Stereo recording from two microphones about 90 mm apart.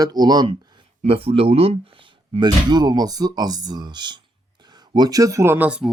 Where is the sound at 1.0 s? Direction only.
90° right; by 5.5 s 35° right (ahead or behind).